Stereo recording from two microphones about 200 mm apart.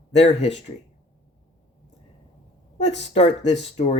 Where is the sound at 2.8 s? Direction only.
35° left (ahead or behind).